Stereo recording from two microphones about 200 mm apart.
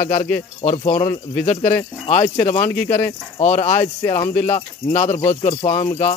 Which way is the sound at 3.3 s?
35° left (ahead or behind).